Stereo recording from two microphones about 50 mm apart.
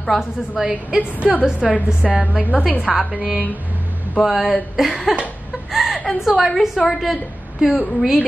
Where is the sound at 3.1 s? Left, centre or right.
Right.